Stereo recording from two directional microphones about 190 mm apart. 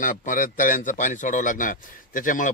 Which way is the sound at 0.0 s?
45° left (ahead or behind).